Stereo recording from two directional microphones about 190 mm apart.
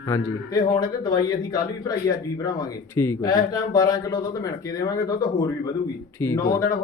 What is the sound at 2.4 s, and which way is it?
Speech, 15° left (ahead or behind).